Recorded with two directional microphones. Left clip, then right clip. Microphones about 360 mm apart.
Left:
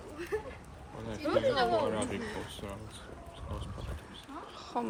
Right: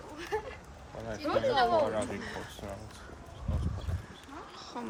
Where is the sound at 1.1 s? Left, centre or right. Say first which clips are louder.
Even; right.